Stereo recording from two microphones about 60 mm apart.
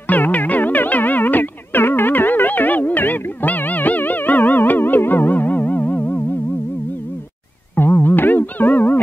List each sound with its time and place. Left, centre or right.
0.1 s music: left
7.7 s music: left